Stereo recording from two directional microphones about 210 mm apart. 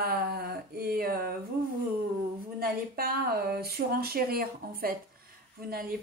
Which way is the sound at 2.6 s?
45° right (ahead or behind).